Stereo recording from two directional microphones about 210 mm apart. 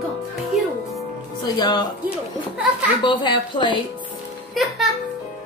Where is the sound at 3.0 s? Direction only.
25° left (ahead or behind).